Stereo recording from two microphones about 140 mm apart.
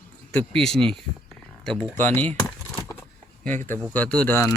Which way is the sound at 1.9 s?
10° left (ahead or behind).